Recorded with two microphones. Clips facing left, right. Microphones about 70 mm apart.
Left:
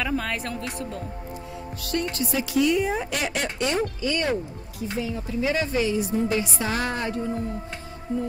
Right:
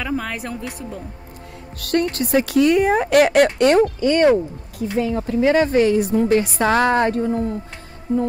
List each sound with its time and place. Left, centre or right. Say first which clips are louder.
0.0 s speech: right 2 dB; centre
1.8 s speech: right 8 dB; right
4.0 s a woman's voice: right 11 dB; right